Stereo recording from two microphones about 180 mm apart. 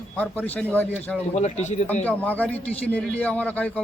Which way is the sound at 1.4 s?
40° left (ahead or behind).